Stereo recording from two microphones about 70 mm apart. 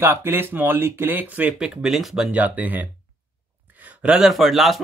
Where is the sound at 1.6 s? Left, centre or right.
Centre.